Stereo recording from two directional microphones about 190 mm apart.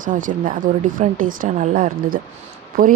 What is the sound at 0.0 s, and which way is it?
Speech, 45° right (ahead or behind).